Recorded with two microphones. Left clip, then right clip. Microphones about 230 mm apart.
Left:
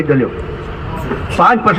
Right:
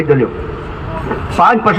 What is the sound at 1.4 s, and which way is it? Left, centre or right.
Speech, right.